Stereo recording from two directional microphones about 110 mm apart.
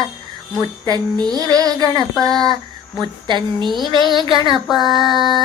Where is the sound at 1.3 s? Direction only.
35° right (ahead or behind).